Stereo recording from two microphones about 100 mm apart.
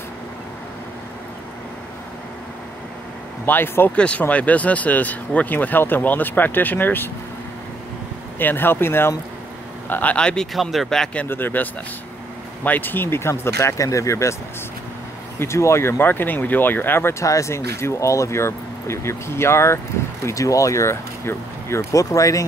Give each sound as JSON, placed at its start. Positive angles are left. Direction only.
{"t": 3.4, "sound": "speech", "side_deg": 20}
{"t": 8.4, "sound": "speech", "side_deg": 20}
{"t": 11.2, "sound": "speech", "side_deg": 20}
{"t": 15.3, "sound": "speech", "side_deg": 30}